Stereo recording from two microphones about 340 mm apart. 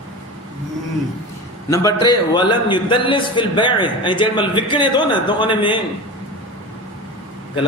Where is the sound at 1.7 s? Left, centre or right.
Centre.